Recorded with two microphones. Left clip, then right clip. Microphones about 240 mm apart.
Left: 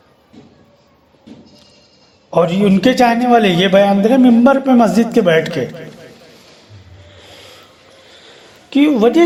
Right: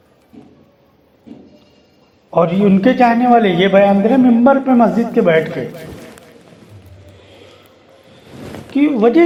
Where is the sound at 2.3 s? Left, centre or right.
Left.